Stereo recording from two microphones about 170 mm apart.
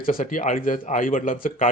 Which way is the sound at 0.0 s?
55° left (ahead or behind).